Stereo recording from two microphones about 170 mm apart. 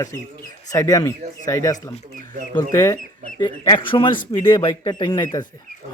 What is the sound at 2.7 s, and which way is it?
Speech, 20° left (ahead or behind).